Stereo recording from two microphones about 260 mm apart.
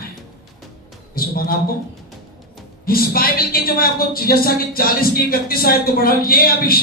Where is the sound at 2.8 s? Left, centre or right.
Left.